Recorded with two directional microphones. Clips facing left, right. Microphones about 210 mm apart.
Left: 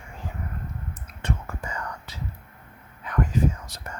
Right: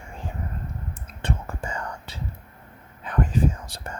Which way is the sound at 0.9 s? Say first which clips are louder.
Right 1 dB; 30° right (ahead or behind).